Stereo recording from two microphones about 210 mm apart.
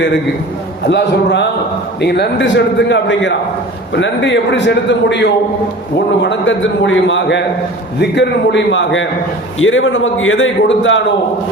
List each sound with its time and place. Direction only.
0.9 s a man's voice: 55° left (ahead or behind)